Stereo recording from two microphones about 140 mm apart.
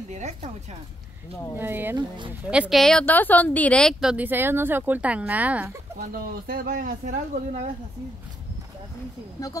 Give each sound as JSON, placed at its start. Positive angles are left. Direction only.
{"t": 0.1, "sound": "speech", "side_deg": -50}
{"t": 1.6, "sound": "speech", "side_deg": -15}
{"t": 2.0, "sound": "speech", "side_deg": -35}
{"t": 2.5, "sound": "a woman's voice", "side_deg": -5}
{"t": 4.0, "sound": "speech", "side_deg": -10}
{"t": 5.9, "sound": "speech", "side_deg": -90}